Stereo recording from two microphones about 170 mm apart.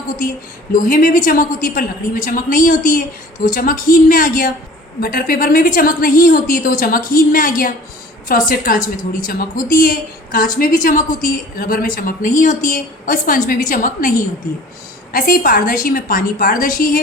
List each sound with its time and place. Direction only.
0.7 s a woman's voice: 50° left (ahead or behind)
15.1 s a woman's voice: 55° left (ahead or behind)